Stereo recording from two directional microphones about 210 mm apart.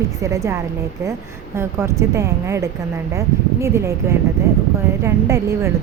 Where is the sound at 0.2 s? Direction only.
15° right (ahead or behind).